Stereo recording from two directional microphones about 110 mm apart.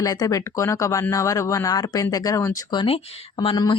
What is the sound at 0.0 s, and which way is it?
Speech, 35° left (ahead or behind).